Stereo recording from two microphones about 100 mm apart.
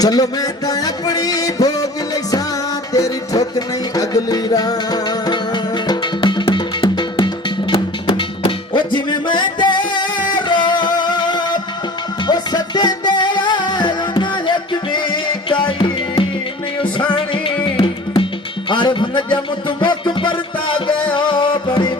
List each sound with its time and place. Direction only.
0.0 s music: 40° left (ahead or behind)